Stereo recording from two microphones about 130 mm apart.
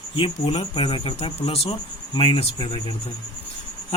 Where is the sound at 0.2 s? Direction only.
45° left (ahead or behind).